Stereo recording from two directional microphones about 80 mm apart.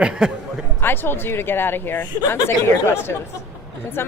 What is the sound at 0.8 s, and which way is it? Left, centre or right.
A woman's voice, left.